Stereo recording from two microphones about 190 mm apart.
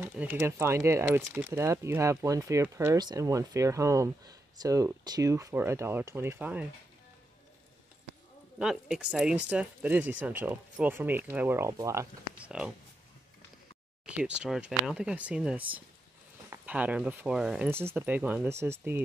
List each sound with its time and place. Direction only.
0.0 s speech: 10° right (ahead or behind)
8.5 s speech: 5° right (ahead or behind)
14.0 s speech: 5° right (ahead or behind)